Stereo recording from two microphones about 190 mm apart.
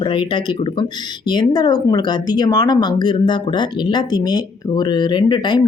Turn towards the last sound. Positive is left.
turn(degrees=25)  # may be behind; listen again after turning